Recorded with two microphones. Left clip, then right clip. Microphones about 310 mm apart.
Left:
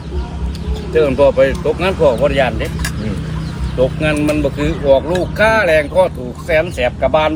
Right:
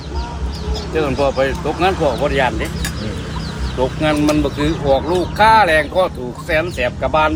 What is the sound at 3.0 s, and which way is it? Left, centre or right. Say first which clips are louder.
Chicken: left 1 dB; right.